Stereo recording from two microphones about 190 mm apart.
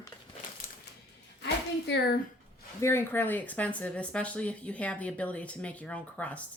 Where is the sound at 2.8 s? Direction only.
10° left (ahead or behind).